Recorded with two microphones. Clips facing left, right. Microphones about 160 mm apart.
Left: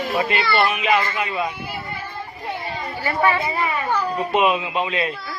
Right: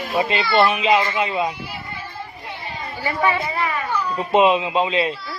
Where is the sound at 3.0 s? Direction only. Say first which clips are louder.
Left 1 dB; 15° right (ahead or behind).